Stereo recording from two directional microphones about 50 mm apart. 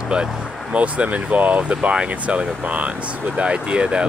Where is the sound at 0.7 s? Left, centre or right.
Right.